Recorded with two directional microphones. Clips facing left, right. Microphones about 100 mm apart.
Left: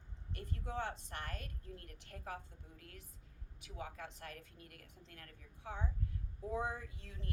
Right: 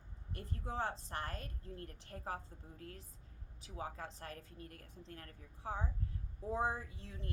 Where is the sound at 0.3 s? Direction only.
35° right (ahead or behind).